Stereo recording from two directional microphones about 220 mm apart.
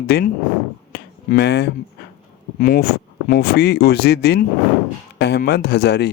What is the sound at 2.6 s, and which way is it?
Speech, 40° left (ahead or behind).